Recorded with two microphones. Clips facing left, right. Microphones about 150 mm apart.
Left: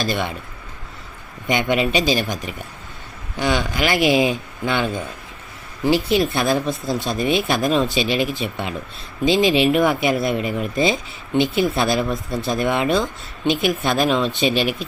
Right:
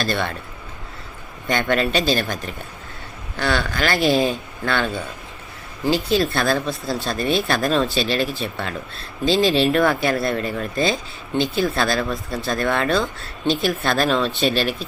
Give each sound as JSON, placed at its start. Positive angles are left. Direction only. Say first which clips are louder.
{"t": 0.1, "sound": "speech", "louder": "even", "side_deg": 15}
{"t": 1.5, "sound": "speech", "louder": "left 1 dB", "side_deg": 15}